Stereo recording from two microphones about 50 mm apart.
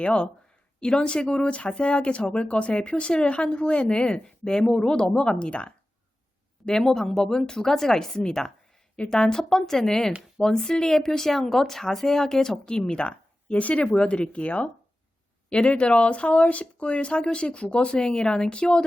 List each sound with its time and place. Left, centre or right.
0.0 s speech: left
6.7 s speech: centre